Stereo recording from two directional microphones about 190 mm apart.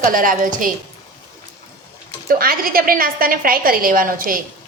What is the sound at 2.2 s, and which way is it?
A woman's voice, 50° right (ahead or behind).